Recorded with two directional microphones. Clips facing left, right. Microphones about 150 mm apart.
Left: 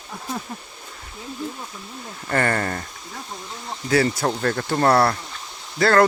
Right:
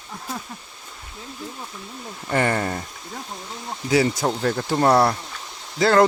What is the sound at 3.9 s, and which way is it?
Speech, 10° right (ahead or behind).